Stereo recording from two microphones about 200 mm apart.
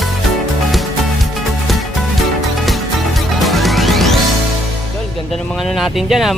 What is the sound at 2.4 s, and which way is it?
Music, centre (ahead or behind).